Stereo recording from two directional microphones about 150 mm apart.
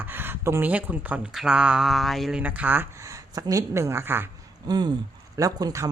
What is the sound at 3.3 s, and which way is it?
Speech, 25° right (ahead or behind).